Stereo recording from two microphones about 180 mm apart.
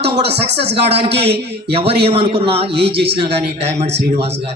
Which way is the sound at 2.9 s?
65° right (ahead or behind).